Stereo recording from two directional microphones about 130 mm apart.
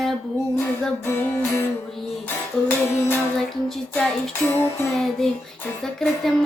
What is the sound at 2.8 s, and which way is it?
Music, 20° left (ahead or behind).